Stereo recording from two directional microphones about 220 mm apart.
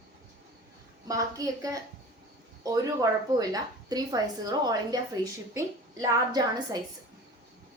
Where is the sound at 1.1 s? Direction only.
15° right (ahead or behind).